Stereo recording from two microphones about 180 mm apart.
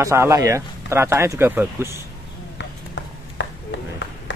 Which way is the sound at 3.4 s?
85° left.